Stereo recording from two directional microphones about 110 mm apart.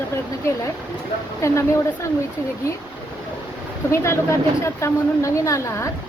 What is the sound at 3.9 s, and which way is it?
Speech, 25° left (ahead or behind).